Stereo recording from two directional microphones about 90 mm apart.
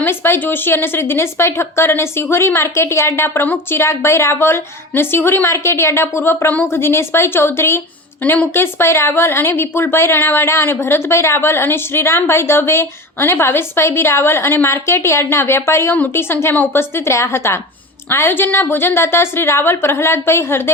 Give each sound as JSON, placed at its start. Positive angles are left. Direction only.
{"t": 0.0, "sound": "speech", "side_deg": 25}